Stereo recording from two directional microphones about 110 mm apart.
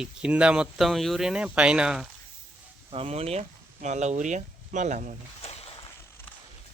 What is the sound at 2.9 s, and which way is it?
Speech, 65° right (ahead or behind).